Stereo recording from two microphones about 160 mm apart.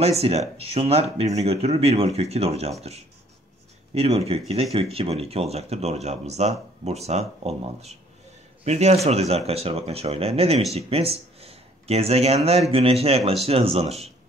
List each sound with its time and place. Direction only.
0.0 s speech: 40° right (ahead or behind)
3.9 s speech: 40° right (ahead or behind)